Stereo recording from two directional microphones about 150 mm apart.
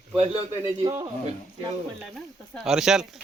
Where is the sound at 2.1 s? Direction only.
5° right (ahead or behind).